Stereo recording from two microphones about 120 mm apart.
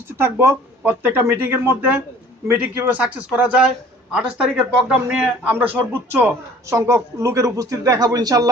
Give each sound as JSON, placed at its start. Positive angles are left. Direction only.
{"t": 0.2, "sound": "a man's voice", "side_deg": -20}